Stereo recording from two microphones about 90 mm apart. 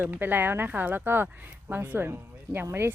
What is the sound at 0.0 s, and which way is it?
Speech, 20° right (ahead or behind).